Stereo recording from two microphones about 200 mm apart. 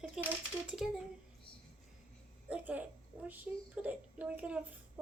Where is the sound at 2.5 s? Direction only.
5° right (ahead or behind).